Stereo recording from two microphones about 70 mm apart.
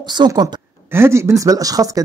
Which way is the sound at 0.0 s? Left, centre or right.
Right.